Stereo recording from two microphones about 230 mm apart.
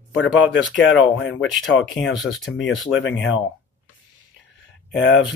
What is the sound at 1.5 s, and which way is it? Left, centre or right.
Speech, centre.